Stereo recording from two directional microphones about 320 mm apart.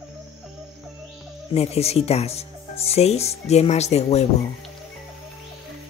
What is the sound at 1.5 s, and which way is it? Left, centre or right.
Speech, centre.